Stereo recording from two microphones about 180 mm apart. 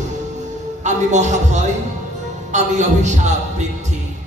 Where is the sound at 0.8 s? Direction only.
40° right (ahead or behind).